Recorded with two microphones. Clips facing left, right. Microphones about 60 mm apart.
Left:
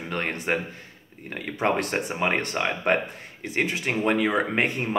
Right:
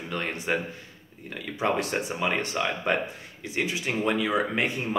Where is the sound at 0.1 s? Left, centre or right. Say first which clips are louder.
Left 2 dB; left.